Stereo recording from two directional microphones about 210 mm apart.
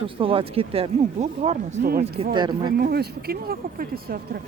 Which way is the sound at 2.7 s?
50° right (ahead or behind).